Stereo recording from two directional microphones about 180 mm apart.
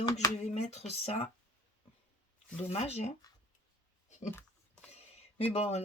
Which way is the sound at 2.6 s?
35° left (ahead or behind).